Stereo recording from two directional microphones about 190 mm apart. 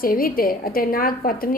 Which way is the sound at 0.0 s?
50° left (ahead or behind).